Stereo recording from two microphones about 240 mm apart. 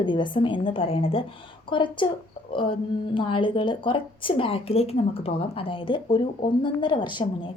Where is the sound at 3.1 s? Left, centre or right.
Left.